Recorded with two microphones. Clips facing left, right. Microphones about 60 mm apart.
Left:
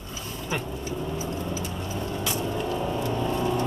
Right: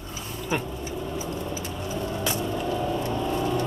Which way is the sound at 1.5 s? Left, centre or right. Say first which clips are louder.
Even; right.